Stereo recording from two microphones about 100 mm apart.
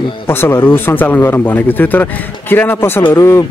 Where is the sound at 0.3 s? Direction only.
20° left (ahead or behind).